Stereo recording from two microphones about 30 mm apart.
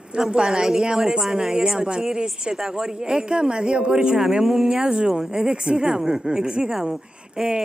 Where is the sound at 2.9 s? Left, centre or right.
Right.